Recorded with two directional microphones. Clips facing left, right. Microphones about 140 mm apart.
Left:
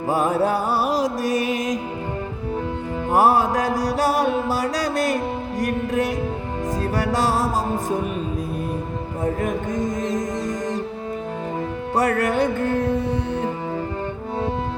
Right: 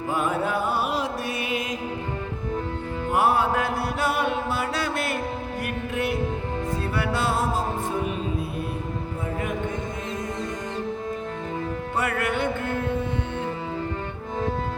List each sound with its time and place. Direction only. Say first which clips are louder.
0.1 s music: left 6 dB; 40° left (ahead or behind)
3.1 s mantra: left 4 dB; 40° left (ahead or behind)
6.9 s music: left 4 dB; 40° left (ahead or behind)
9.2 s music: left 7 dB; 45° left (ahead or behind)
11.9 s music: left 7 dB; 40° left (ahead or behind)